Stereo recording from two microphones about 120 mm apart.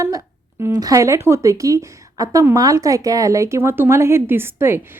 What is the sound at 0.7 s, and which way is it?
A woman's voice, 30° right (ahead or behind).